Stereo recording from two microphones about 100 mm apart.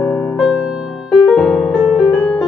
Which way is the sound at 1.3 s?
5° left (ahead or behind).